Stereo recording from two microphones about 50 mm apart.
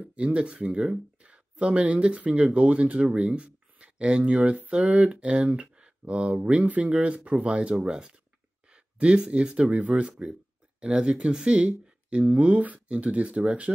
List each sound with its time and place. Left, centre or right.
0.1 s speech: right